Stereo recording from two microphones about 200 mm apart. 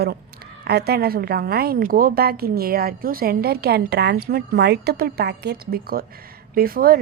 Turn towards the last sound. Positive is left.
turn(degrees=-45)  # may be behind; listen again after turning